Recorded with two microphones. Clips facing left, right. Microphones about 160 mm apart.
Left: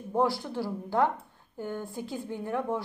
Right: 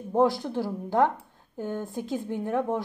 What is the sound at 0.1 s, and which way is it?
Speech, 20° right (ahead or behind).